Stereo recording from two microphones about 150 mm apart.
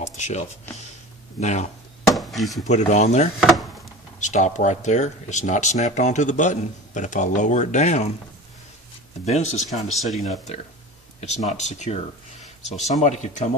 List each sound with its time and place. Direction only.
0.0 s music: 50° left (ahead or behind)
1.4 s speech: 50° left (ahead or behind)
2.1 s a sound: centre (ahead or behind)
2.6 s speech: 50° left (ahead or behind)
3.3 s speech: centre (ahead or behind)
4.2 s speech: 55° left (ahead or behind)
9.2 s speech: 50° left (ahead or behind)
9.8 s speech: centre (ahead or behind)
11.1 s speech: 50° left (ahead or behind)
13.0 s speech: 50° left (ahead or behind)